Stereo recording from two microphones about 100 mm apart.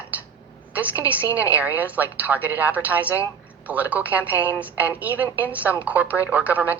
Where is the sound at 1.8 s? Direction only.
15° right (ahead or behind).